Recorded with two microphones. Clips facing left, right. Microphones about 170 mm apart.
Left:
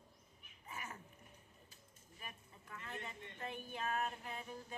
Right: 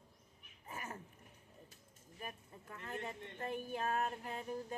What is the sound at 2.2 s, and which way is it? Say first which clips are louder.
Speech: right 6 dB; 45° right (ahead or behind).